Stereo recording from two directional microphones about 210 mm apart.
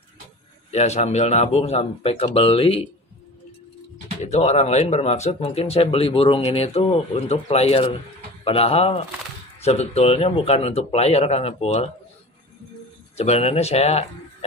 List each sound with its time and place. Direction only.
0.7 s speech: 30° left (ahead or behind)
4.2 s speech: 30° left (ahead or behind)
13.2 s speech: 30° left (ahead or behind)